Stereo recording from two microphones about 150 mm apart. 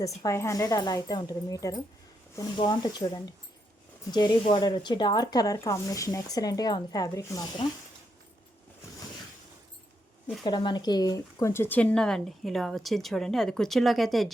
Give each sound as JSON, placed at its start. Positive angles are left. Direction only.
{"t": 0.2, "sound": "speech", "side_deg": 20}
{"t": 10.4, "sound": "speech", "side_deg": 30}